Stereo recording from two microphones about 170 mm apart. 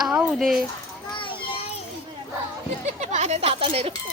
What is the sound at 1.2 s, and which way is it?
Children playing, 30° left (ahead or behind).